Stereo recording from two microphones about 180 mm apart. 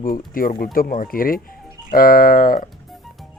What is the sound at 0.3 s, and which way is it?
A man's voice, 55° left (ahead or behind).